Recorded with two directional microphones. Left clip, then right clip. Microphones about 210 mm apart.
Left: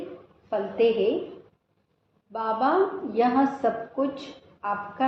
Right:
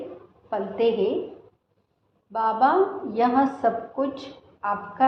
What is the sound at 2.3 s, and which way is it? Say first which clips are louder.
A woman's voice: right 3 dB; 15° right (ahead or behind).